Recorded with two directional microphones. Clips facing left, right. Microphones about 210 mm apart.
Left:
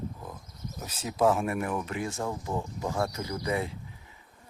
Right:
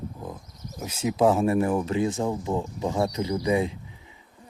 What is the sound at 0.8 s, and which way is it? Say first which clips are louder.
Speech: right 5 dB; 10° right (ahead or behind).